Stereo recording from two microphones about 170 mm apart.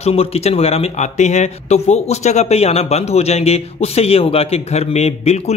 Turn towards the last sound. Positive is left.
turn(degrees=40)  # may be behind; listen again after turning